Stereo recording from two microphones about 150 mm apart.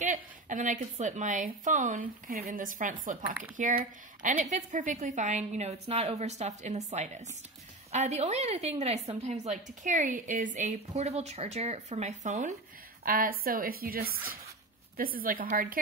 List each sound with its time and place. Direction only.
0.0 s a woman's voice: 55° right (ahead or behind)
13.0 s a woman's voice: 75° right (ahead or behind)